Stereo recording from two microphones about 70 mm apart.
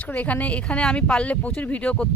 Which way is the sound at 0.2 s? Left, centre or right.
Left.